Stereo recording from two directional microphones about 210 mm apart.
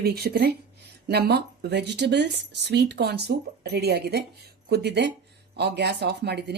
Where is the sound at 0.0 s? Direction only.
50° right (ahead or behind).